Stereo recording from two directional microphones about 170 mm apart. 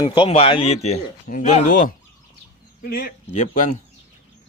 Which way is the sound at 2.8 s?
65° left (ahead or behind).